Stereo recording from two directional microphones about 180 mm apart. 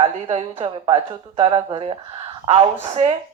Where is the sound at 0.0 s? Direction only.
30° right (ahead or behind).